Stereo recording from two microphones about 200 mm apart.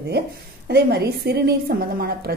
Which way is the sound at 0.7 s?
55° right (ahead or behind).